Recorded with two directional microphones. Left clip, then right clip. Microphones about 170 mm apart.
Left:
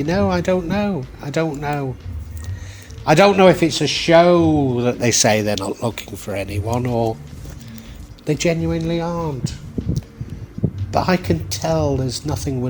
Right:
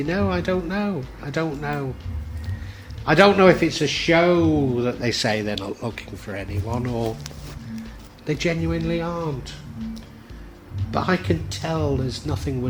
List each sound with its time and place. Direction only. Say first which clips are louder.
0.0 s speech: left 5 dB; 40° left (ahead or behind)
3.0 s a man's voice: left 3 dB; 40° left (ahead or behind)
8.3 s speech: left 5 dB; 35° left (ahead or behind)
10.9 s speech: left 4 dB; 40° left (ahead or behind)